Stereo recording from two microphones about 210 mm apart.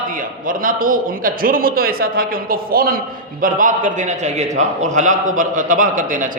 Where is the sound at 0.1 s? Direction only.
40° right (ahead or behind).